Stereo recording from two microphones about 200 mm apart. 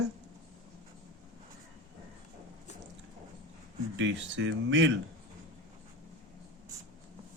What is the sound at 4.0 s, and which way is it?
Speech, 70° right (ahead or behind).